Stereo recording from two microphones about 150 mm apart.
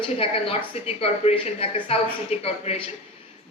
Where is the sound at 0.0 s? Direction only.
40° left (ahead or behind).